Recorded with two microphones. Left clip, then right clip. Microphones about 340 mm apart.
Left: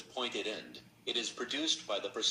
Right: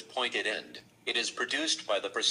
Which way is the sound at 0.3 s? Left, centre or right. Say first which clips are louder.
Right 7 dB; right.